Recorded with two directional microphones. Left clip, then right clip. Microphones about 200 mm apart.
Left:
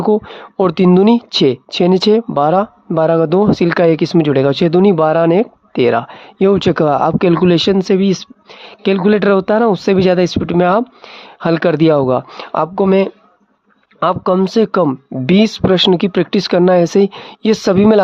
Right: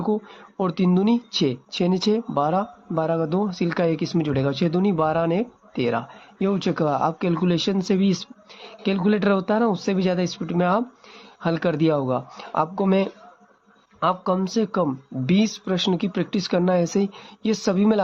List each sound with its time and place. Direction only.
0.0 s speech: 40° left (ahead or behind)